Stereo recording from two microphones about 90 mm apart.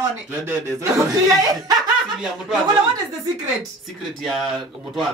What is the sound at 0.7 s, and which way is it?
Speech, 40° right (ahead or behind).